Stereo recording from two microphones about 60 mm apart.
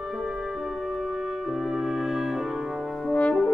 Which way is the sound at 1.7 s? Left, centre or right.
Centre.